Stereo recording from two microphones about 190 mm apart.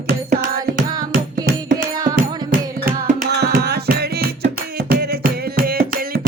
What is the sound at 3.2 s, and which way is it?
Music, 60° right (ahead or behind).